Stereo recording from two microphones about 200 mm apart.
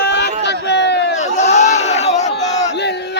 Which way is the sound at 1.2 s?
35° left (ahead or behind).